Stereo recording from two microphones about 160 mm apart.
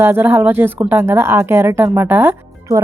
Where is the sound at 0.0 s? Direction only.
15° right (ahead or behind).